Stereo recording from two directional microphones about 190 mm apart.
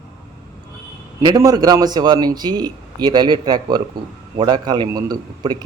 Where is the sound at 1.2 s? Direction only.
20° right (ahead or behind).